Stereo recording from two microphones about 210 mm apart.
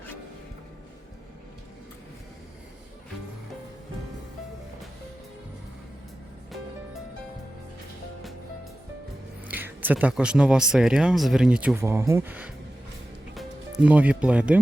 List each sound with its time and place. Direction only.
9.5 s speech: 10° right (ahead or behind)